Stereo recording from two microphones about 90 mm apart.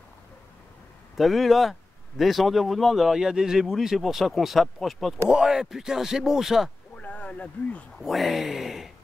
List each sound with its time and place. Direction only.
1.1 s speech: centre (ahead or behind)
7.0 s a sound: 15° left (ahead or behind)
8.0 s speech: centre (ahead or behind)